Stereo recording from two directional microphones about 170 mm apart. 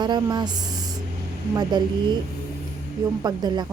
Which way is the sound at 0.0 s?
25° right (ahead or behind).